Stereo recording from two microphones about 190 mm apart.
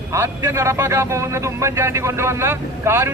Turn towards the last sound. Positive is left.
turn(degrees=-15)  # may be behind; listen again after turning